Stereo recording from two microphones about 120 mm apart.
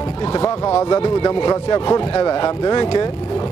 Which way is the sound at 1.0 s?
40° left (ahead or behind).